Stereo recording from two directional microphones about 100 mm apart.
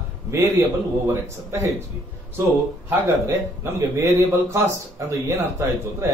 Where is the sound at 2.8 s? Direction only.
25° right (ahead or behind).